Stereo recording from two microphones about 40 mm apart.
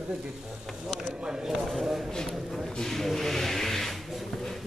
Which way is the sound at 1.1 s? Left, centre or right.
Centre.